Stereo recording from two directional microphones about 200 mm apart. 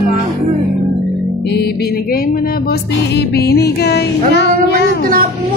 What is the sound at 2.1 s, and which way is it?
Music, 50° left (ahead or behind).